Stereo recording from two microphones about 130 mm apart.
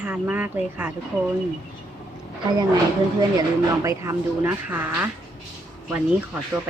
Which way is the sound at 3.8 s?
25° right (ahead or behind).